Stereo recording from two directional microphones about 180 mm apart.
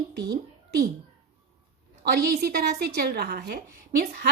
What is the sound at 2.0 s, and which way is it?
A woman's voice, 60° right (ahead or behind).